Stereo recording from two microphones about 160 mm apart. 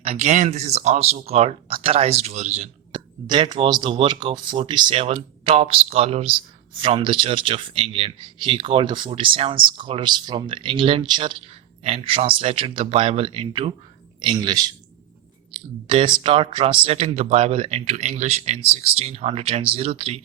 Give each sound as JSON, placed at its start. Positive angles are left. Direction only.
{"t": 0.0, "sound": "speech", "side_deg": -40}
{"t": 2.9, "sound": "a man's voice", "side_deg": -30}
{"t": 15.9, "sound": "speech", "side_deg": -30}